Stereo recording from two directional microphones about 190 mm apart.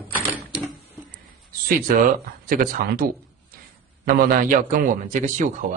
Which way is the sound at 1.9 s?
45° right (ahead or behind).